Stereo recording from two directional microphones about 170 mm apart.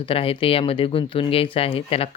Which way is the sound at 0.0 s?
35° left (ahead or behind).